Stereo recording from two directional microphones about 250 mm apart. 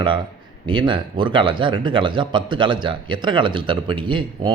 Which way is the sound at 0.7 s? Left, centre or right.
Centre.